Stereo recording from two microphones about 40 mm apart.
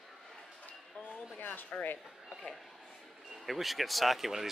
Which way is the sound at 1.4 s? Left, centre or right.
Left.